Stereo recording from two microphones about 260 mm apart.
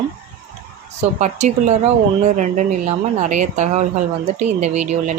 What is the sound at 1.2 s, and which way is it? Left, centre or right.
Speech, right.